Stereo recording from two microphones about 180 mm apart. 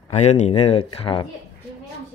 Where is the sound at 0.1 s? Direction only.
40° left (ahead or behind).